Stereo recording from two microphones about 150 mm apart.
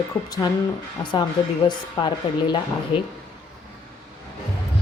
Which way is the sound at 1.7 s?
30° left (ahead or behind).